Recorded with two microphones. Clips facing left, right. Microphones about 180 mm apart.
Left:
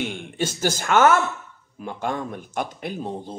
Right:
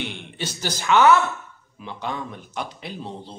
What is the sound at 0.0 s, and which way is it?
Speech, 45° left (ahead or behind).